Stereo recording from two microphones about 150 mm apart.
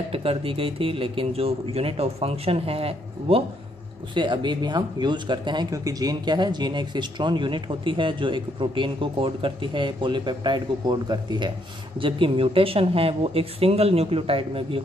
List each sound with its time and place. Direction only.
0.1 s speech: 40° right (ahead or behind)